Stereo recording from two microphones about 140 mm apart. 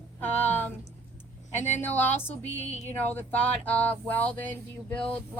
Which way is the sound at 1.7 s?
15° left (ahead or behind).